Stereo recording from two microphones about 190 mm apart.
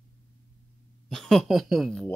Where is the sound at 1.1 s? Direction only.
Centre (ahead or behind).